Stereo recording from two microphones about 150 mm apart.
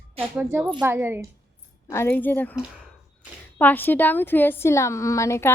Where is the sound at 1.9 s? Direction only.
15° left (ahead or behind).